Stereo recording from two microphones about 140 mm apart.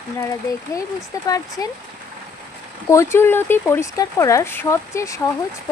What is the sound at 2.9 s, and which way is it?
Speech, 20° left (ahead or behind).